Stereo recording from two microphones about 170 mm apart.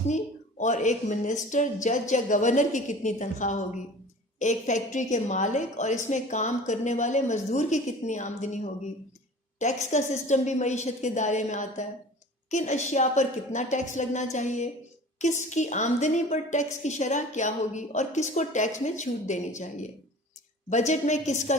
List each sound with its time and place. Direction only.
0.6 s a woman's voice: 45° left (ahead or behind)